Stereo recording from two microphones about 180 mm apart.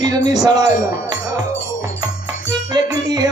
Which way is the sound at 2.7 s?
20° right (ahead or behind).